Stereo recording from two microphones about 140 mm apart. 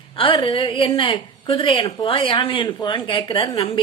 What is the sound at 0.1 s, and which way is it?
A woman's voice, 40° left (ahead or behind).